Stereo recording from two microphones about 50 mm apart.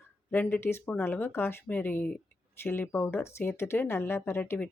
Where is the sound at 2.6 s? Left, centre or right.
Left.